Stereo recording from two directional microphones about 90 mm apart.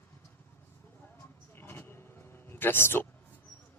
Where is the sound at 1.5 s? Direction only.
25° left (ahead or behind).